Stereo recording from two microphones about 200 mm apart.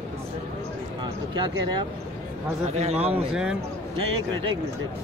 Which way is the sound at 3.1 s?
5° right (ahead or behind).